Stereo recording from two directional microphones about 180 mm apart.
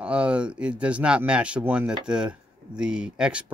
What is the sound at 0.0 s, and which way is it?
Speech, 5° right (ahead or behind).